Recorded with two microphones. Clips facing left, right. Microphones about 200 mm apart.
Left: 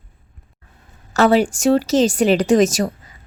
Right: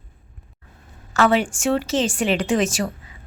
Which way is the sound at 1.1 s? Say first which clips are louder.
Left 4 dB; 40° left (ahead or behind).